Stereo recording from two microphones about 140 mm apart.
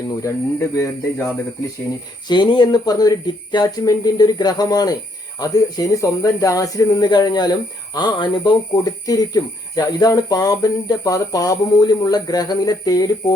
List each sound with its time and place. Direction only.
0.2 s speech: 20° left (ahead or behind)
2.2 s speech: 30° left (ahead or behind)